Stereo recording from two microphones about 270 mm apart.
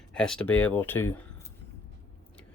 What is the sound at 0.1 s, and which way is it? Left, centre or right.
Speech, centre.